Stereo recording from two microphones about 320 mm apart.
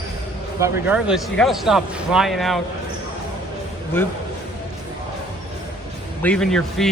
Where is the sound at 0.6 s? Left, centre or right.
Centre.